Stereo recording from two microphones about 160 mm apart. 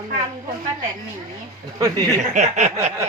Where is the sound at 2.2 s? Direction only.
45° right (ahead or behind).